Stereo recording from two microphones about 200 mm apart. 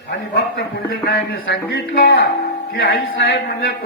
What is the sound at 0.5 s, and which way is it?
A man's voice, 50° left (ahead or behind).